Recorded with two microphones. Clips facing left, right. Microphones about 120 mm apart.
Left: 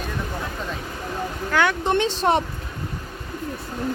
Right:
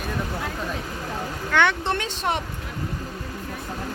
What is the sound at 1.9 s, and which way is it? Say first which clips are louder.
Speech: left 6 dB; 25° left (ahead or behind).